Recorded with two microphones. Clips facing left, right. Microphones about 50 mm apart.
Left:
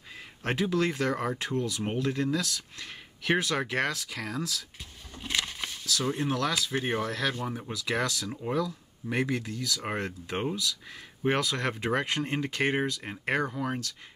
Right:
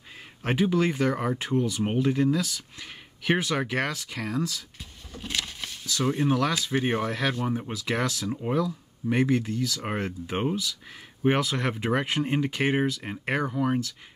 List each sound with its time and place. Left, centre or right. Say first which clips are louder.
0.4 s speech: right 3 dB; centre
5.1 s a sound: left 1 dB; centre
5.9 s speech: right 5 dB; centre